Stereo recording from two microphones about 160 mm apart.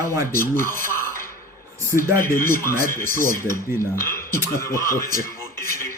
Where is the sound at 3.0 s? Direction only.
55° right (ahead or behind).